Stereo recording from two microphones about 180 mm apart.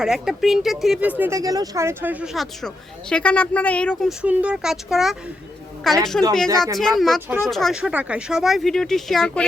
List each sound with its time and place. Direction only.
0.0 s speech: 5° right (ahead or behind)
4.2 s speech: 5° right (ahead or behind)